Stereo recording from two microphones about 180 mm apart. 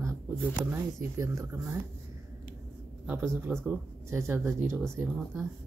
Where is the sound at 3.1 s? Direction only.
15° right (ahead or behind).